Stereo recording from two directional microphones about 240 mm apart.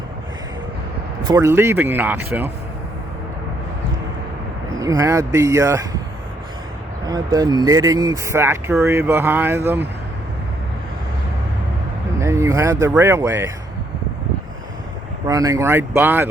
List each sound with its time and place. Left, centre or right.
1.2 s speech: centre
4.8 s speech: centre
7.3 s speech: centre
12.2 s speech: centre
15.3 s speech: centre